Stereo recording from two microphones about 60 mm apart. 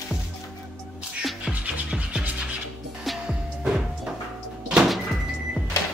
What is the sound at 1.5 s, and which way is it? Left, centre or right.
Music, right.